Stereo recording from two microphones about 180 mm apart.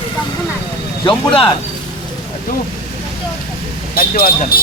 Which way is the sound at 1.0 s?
30° left (ahead or behind).